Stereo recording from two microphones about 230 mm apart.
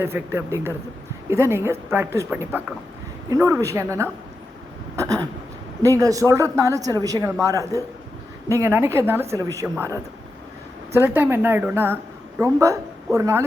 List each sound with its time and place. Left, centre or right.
0.0 s speech: centre